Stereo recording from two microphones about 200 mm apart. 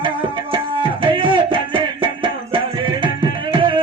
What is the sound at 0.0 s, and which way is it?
Music, 25° right (ahead or behind).